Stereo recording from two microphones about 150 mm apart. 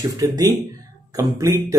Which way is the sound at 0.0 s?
25° right (ahead or behind).